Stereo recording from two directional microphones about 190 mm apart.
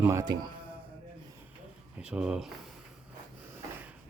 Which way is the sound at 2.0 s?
5° right (ahead or behind).